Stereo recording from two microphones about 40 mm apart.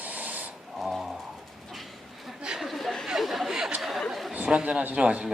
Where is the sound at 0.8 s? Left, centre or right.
Centre.